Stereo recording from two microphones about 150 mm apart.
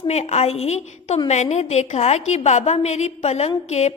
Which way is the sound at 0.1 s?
45° left (ahead or behind).